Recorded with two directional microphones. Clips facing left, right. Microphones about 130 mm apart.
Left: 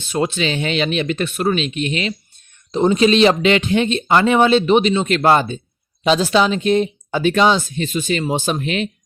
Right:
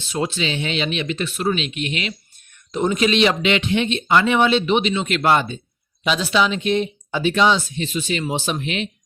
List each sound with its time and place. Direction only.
0.1 s speech: 55° left (ahead or behind)